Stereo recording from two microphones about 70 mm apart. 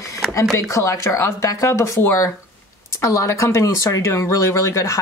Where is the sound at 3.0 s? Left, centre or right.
Left.